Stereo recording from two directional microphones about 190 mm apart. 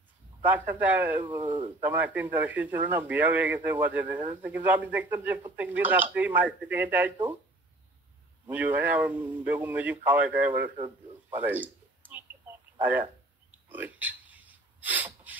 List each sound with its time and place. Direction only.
0.4 s a man's voice: 10° right (ahead or behind)
1.4 s speech: 25° right (ahead or behind)
1.8 s a man's voice: 10° right (ahead or behind)
8.5 s a man's voice: 10° right (ahead or behind)
11.2 s a sound: 10° right (ahead or behind)